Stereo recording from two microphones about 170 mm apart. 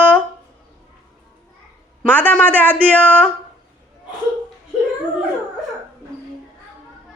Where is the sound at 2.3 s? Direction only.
10° left (ahead or behind).